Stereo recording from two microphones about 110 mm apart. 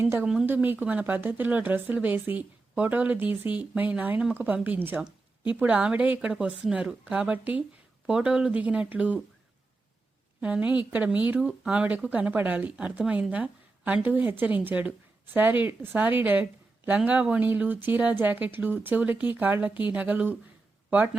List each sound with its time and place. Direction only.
0.0 s speech: 20° right (ahead or behind)
10.4 s speech: 10° right (ahead or behind)